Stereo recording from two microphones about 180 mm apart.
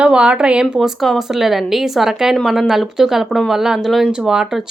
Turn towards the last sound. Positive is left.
turn(degrees=-5)  # may be behind; listen again after turning